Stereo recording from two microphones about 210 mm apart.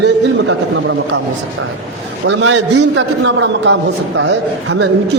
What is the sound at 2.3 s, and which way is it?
A man's voice, 60° right (ahead or behind).